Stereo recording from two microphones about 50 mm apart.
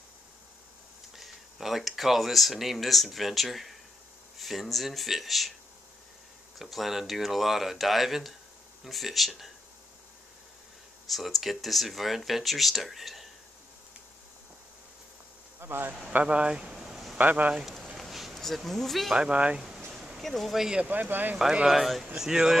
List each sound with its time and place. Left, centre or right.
1.1 s speech: centre
6.6 s speech: centre
11.1 s speech: centre
15.6 s a man's voice: right
16.3 s a sound: centre
17.2 s speech: right
17.6 s a sound: centre
18.4 s speech: centre
19.1 s speech: centre
20.2 s speech: centre
20.9 s speech: right
21.6 s speech: centre